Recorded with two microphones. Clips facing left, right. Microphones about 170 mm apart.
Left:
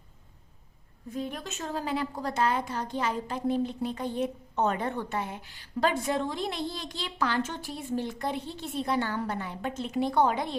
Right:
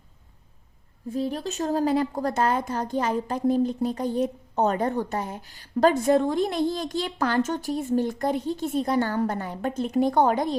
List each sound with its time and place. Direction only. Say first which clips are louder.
1.1 s a woman's voice: right 7 dB; 30° right (ahead or behind)